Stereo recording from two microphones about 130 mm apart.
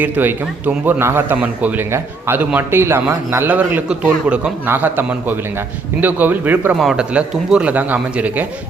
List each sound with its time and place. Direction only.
0.0 s a man's voice: 15° right (ahead or behind)